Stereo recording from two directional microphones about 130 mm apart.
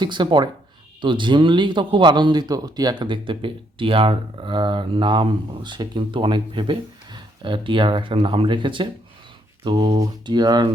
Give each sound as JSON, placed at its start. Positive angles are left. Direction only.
{"t": 0.0, "sound": "speech", "side_deg": -35}